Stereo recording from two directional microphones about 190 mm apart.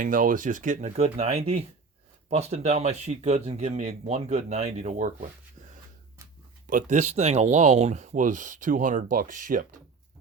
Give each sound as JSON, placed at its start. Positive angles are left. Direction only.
{"t": 0.0, "sound": "speech", "side_deg": -45}
{"t": 6.7, "sound": "speech", "side_deg": -45}